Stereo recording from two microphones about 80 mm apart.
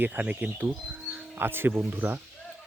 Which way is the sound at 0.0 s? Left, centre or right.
Right.